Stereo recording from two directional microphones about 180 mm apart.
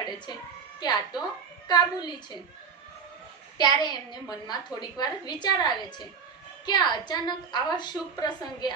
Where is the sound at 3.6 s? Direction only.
25° left (ahead or behind).